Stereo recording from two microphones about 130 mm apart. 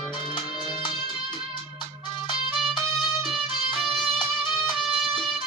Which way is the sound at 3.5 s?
40° left (ahead or behind).